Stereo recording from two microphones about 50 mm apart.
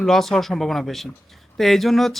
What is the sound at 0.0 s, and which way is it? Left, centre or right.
Speech, centre.